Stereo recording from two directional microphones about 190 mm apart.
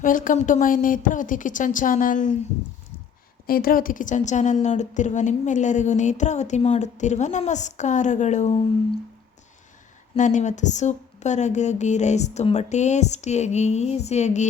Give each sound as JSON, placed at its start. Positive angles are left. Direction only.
{"t": 0.0, "sound": "a woman's voice", "side_deg": 45}
{"t": 3.4, "sound": "a woman's voice", "side_deg": 50}
{"t": 10.2, "sound": "a woman's voice", "side_deg": 40}